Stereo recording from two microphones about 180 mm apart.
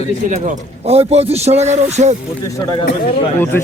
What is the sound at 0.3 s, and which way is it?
A man's voice, 40° right (ahead or behind).